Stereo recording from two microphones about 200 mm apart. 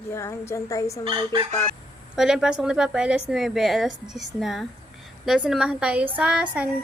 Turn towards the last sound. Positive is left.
turn(degrees=-5)  # may be behind; listen again after turning